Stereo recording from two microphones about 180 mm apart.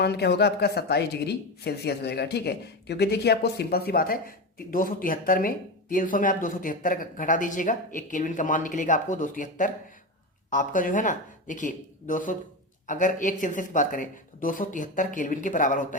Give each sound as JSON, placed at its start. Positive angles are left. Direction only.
{"t": 0.0, "sound": "a woman's voice", "side_deg": 65}